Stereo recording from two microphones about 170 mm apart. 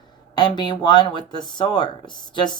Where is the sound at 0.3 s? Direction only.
25° left (ahead or behind).